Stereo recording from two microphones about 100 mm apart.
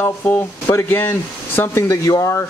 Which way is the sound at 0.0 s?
20° left (ahead or behind).